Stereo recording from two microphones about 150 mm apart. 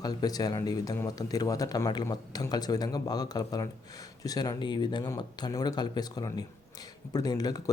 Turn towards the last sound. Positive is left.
turn(degrees=25)  # may be behind; listen again after turning